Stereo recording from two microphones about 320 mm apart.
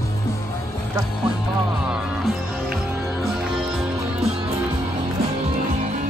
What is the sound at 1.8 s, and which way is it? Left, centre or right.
Music, centre.